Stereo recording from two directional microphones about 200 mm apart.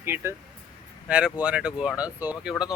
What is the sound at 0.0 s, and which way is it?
Speech, 10° right (ahead or behind).